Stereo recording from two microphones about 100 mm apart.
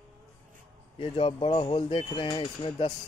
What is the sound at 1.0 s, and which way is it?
Speech, 65° left (ahead or behind).